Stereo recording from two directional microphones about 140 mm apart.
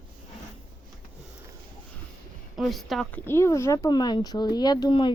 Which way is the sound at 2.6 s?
Centre (ahead or behind).